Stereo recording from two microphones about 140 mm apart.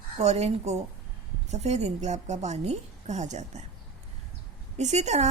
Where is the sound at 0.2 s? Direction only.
50° right (ahead or behind).